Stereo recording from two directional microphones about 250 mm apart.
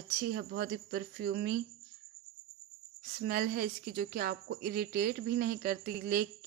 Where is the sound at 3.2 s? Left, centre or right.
Right.